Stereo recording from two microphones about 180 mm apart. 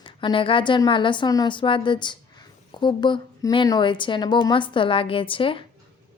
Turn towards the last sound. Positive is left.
turn(degrees=30)  # may be behind; listen again after turning